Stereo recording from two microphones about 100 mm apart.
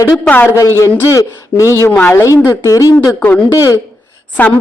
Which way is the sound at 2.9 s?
20° left (ahead or behind).